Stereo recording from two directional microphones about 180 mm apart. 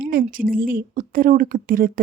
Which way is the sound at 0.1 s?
50° right (ahead or behind).